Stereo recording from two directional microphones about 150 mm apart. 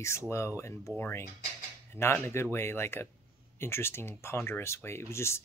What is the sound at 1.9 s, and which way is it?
Speech, 15° left (ahead or behind).